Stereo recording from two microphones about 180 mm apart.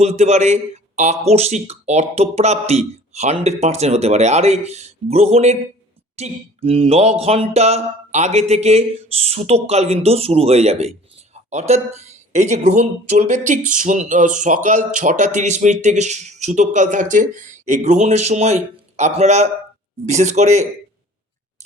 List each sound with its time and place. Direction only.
0.0 s speech: 40° right (ahead or behind)